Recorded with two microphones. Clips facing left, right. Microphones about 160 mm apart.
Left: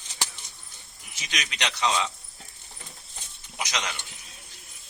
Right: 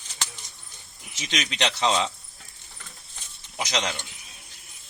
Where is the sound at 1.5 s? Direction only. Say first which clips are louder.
Right 3 dB; 30° right (ahead or behind).